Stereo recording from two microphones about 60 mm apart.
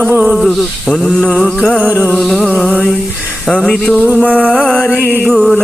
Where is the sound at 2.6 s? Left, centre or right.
Left.